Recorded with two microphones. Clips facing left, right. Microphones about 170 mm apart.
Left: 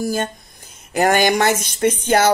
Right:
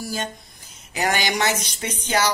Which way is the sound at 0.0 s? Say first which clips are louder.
Left 7 dB; 50° left (ahead or behind).